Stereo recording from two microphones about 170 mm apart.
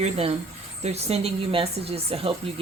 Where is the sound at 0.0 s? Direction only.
35° right (ahead or behind).